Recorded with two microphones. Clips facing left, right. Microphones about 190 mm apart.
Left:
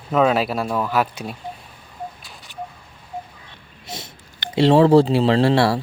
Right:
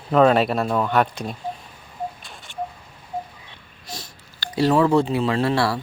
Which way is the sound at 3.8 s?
20° left (ahead or behind).